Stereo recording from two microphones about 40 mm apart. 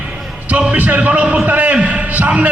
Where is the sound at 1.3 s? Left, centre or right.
Right.